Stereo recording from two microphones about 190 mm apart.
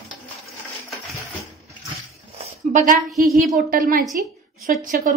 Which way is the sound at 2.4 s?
40° right (ahead or behind).